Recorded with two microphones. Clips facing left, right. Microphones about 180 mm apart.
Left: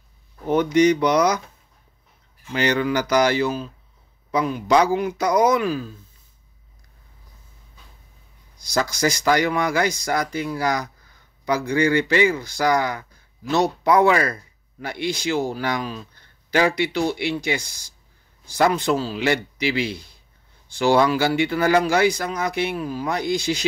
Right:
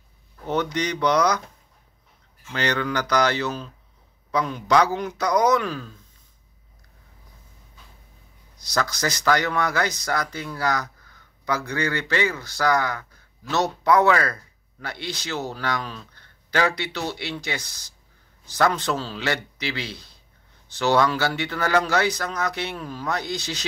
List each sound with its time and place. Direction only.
0.5 s speech: 10° left (ahead or behind)
2.5 s speech: 10° left (ahead or behind)
8.5 s speech: 10° left (ahead or behind)